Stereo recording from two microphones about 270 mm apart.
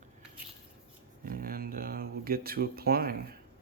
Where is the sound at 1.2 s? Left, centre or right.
Right.